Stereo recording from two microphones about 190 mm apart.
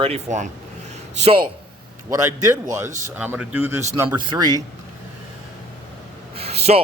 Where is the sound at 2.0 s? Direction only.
15° right (ahead or behind).